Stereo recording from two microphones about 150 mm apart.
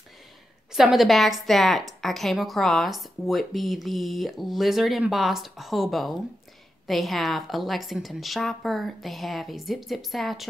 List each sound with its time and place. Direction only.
0.7 s a woman's voice: centre (ahead or behind)